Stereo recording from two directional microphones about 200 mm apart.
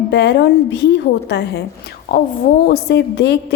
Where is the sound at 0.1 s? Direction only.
60° left (ahead or behind).